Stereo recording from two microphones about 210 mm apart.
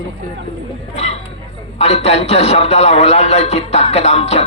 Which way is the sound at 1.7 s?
30° left (ahead or behind).